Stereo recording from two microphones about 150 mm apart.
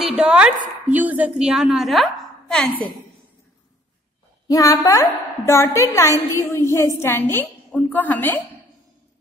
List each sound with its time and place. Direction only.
0.1 s a woman's voice: 5° right (ahead or behind)
4.5 s a woman's voice: 25° left (ahead or behind)